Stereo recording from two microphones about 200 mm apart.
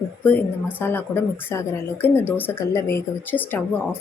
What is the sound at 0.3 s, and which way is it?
A woman's voice, 10° left (ahead or behind).